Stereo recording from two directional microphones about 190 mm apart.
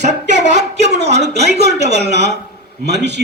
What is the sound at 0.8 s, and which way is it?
Speech, 60° right (ahead or behind).